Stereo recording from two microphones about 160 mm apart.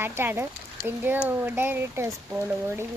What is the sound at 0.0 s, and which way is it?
Speech, 15° right (ahead or behind).